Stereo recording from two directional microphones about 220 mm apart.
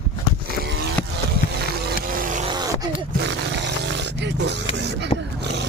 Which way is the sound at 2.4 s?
20° right (ahead or behind).